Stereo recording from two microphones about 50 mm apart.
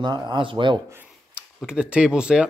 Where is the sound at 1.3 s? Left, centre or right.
Centre.